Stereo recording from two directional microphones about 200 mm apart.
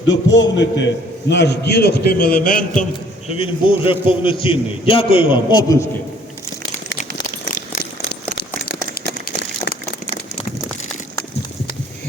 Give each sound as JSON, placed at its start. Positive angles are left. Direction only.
{"t": 0.3, "sound": "a man's voice", "side_deg": 65}
{"t": 3.2, "sound": "a man's voice", "side_deg": 30}
{"t": 9.0, "sound": "a sound", "side_deg": 55}